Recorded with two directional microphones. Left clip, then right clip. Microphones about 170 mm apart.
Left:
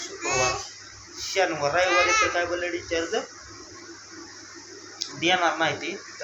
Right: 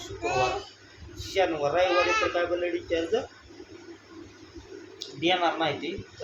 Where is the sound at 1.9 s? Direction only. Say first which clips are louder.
Left 3 dB; 45° right (ahead or behind).